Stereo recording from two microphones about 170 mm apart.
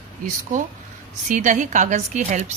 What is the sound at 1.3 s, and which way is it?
A woman's voice, 50° right (ahead or behind).